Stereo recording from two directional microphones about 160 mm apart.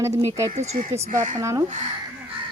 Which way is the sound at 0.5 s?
40° right (ahead or behind).